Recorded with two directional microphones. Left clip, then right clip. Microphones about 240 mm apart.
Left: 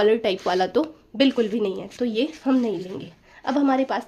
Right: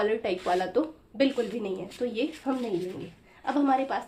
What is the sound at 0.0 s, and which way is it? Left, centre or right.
A woman's voice, left.